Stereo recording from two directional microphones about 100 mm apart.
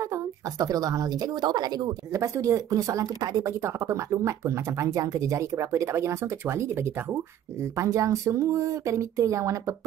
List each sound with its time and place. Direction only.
0.1 s speech: 35° right (ahead or behind)
2.1 s speech: 30° right (ahead or behind)